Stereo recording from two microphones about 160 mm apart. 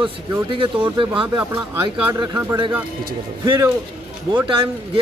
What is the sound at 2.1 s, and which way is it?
Speech, 20° right (ahead or behind).